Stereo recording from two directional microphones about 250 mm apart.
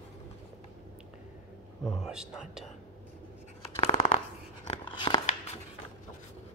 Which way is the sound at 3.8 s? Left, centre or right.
Left.